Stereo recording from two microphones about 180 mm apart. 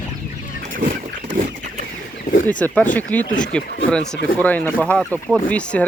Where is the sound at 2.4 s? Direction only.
10° left (ahead or behind).